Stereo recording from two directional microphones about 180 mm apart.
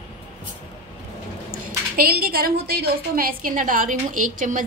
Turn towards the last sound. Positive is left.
turn(degrees=-45)  # may be behind; listen again after turning